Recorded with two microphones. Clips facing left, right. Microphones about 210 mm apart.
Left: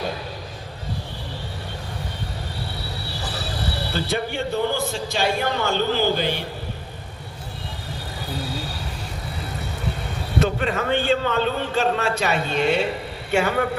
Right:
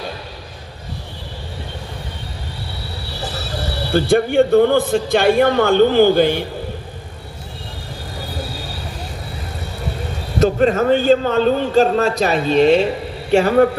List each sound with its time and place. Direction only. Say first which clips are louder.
4.1 s a man's voice: right 14 dB; 55° right (ahead or behind)
10.4 s a man's voice: right 10 dB; 40° right (ahead or behind)